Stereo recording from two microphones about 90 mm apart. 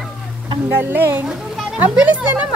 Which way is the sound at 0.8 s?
25° right (ahead or behind).